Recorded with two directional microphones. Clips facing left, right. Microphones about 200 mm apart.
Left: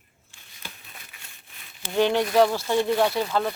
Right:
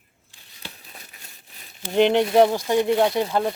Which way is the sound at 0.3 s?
35° right (ahead or behind).